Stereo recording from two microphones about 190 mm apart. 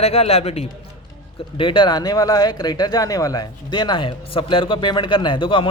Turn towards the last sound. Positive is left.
turn(degrees=25)  # may be behind; listen again after turning